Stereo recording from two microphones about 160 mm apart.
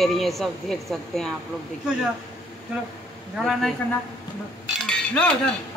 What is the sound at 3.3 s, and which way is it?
Speech, centre (ahead or behind).